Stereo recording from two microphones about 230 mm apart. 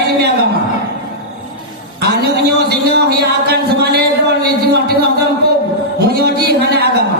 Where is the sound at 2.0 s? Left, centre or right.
Right.